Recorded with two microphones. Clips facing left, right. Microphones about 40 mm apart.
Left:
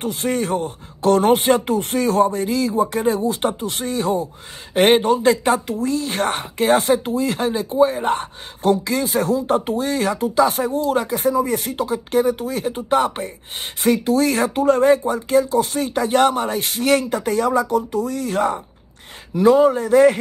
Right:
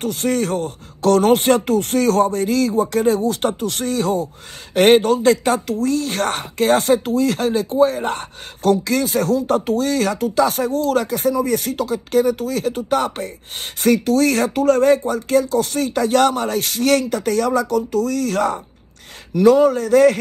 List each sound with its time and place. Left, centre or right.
0.0 s speech: left
11.2 s speech: left
11.5 s speech: centre